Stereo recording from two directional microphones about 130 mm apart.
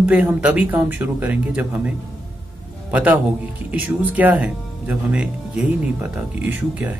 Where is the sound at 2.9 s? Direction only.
10° right (ahead or behind).